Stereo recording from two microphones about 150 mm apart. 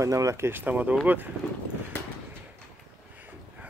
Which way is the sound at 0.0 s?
20° right (ahead or behind).